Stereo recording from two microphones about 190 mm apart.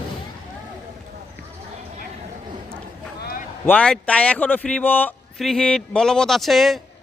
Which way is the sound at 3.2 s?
50° left (ahead or behind).